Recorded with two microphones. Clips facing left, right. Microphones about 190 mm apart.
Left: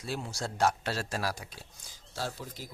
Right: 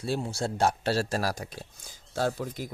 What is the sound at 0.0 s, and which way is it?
Speech, 30° right (ahead or behind).